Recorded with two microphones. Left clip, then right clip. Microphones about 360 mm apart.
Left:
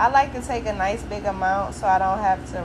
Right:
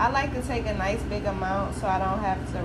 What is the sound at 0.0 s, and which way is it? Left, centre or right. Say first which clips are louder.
A woman's voice: left 6 dB; centre.